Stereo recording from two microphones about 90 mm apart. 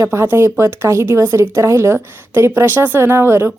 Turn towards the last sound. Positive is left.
turn(degrees=-25)  # may be behind; listen again after turning